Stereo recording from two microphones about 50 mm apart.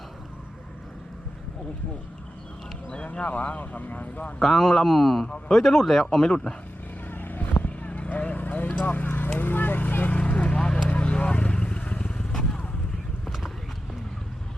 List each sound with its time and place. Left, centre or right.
2.9 s speech: left
4.4 s a man's voice: centre
7.1 s vehicle: left
9.0 s speech: left
9.4 s a sound: left
10.2 s vehicle: left
13.2 s clip-clop: centre